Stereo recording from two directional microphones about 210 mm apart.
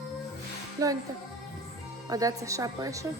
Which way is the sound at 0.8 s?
15° right (ahead or behind).